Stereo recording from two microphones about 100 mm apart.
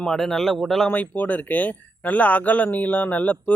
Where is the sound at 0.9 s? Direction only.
15° left (ahead or behind).